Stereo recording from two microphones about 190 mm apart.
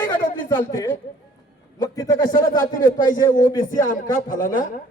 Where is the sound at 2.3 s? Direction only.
45° left (ahead or behind).